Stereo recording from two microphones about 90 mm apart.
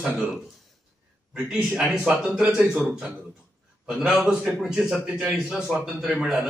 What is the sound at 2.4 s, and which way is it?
Speech, 15° right (ahead or behind).